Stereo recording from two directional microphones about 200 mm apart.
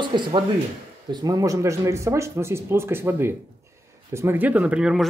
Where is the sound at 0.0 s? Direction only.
25° right (ahead or behind).